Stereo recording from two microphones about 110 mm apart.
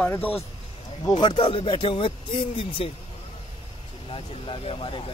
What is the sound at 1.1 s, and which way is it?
Speech, 50° left (ahead or behind).